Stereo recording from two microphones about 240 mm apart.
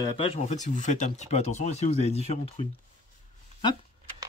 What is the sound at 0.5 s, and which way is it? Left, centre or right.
Speech, left.